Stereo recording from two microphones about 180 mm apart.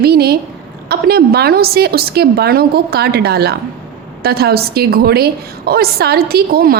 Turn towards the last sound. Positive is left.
turn(degrees=-60)  # may be behind; listen again after turning